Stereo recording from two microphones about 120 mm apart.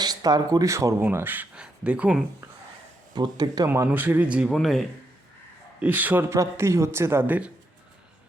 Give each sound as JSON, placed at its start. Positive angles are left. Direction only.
{"t": 0.0, "sound": "speech", "side_deg": -35}
{"t": 1.0, "sound": "speech", "side_deg": -15}
{"t": 3.2, "sound": "speech", "side_deg": -35}
{"t": 3.7, "sound": "speech", "side_deg": -15}
{"t": 4.5, "sound": "speech", "side_deg": 0}
{"t": 5.8, "sound": "a man's voice", "side_deg": -15}